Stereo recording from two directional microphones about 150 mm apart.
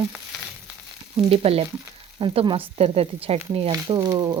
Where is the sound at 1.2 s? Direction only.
40° right (ahead or behind).